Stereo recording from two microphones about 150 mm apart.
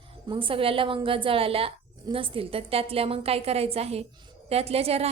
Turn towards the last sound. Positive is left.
turn(degrees=-40)  # may be behind; listen again after turning